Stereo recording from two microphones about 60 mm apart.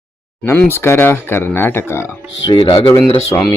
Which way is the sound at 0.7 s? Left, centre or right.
Left.